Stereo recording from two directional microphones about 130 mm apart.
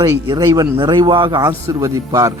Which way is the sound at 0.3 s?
30° right (ahead or behind).